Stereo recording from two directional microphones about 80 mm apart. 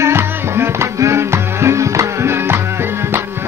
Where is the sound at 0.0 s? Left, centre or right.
Right.